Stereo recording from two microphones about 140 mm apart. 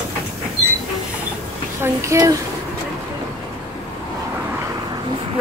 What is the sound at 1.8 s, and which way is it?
Speech, 20° right (ahead or behind).